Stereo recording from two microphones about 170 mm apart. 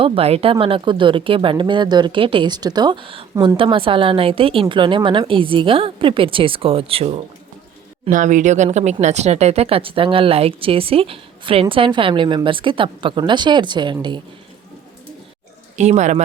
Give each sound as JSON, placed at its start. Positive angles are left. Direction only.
{"t": 0.0, "sound": "speech", "side_deg": -35}
{"t": 3.3, "sound": "speech", "side_deg": -20}
{"t": 3.6, "sound": "speech", "side_deg": -30}
{"t": 8.1, "sound": "speech", "side_deg": -50}
{"t": 15.7, "sound": "speech", "side_deg": -45}